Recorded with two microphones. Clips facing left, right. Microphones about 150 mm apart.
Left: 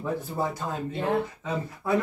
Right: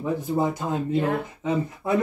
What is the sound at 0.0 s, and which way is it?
Speech, 20° right (ahead or behind).